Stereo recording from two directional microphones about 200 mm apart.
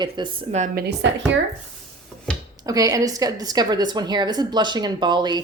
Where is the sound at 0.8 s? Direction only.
60° right (ahead or behind).